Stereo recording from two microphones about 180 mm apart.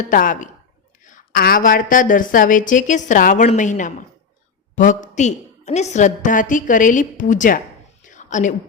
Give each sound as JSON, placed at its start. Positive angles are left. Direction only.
{"t": 0.0, "sound": "a woman's voice", "side_deg": 50}
{"t": 8.1, "sound": "whispering", "side_deg": 45}